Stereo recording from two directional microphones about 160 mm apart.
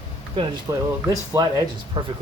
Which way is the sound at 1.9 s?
30° right (ahead or behind).